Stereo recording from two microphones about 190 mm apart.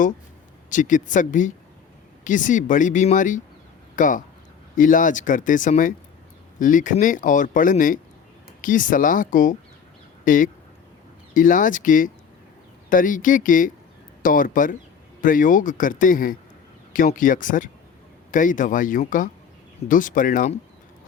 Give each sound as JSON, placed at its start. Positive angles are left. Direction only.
{"t": 0.7, "sound": "speech", "side_deg": 40}